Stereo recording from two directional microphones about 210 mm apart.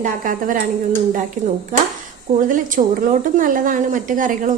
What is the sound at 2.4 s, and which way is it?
A woman's voice, 40° right (ahead or behind).